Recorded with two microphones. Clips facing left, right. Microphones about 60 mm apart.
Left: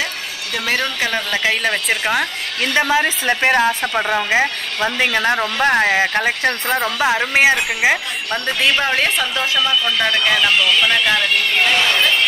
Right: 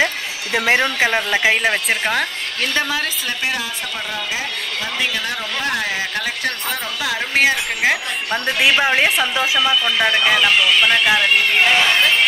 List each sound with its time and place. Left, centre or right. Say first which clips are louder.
0.0 s speech: right 4 dB; right
2.0 s speech: left 1 dB; centre
2.7 s a woman's voice: left 6 dB; centre
3.3 s a woman's voice: left 8 dB; left
8.3 s a woman's voice: right 1 dB; centre